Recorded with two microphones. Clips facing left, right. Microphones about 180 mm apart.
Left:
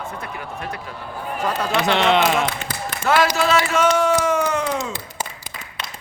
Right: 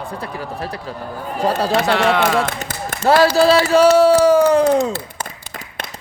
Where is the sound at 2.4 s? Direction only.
50° right (ahead or behind).